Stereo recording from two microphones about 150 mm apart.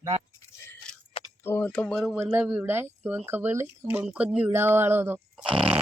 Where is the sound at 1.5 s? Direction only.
10° left (ahead or behind).